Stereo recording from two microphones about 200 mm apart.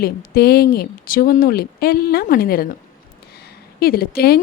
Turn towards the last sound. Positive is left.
turn(degrees=50)  # may be behind; listen again after turning